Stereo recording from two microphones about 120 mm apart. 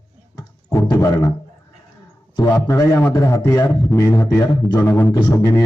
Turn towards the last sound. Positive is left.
turn(degrees=25)  # may be behind; listen again after turning